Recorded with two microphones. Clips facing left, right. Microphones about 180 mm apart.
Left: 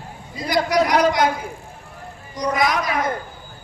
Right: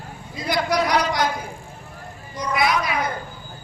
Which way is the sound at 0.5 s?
45° left (ahead or behind).